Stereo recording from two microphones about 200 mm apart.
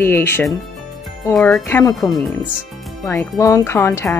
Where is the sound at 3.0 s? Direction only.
15° left (ahead or behind).